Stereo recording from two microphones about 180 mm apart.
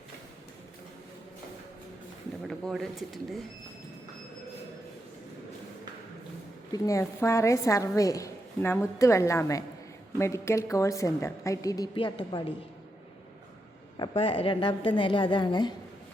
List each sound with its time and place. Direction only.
2.5 s speech: centre (ahead or behind)
6.7 s a woman's voice: 15° left (ahead or behind)
13.9 s a woman's voice: 30° left (ahead or behind)